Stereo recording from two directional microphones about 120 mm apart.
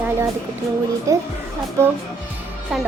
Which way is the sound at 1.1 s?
25° right (ahead or behind).